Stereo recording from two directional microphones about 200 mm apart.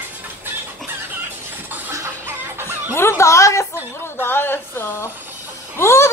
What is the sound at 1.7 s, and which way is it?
Music, 10° right (ahead or behind).